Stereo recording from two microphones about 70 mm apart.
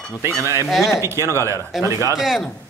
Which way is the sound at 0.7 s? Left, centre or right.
Centre.